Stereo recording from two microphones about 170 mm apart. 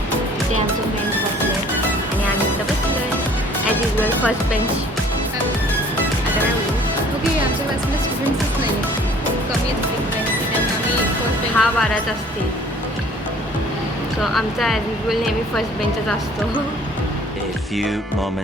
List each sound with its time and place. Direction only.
11.5 s speech: 5° left (ahead or behind)
14.2 s speech: centre (ahead or behind)
17.7 s speech: centre (ahead or behind)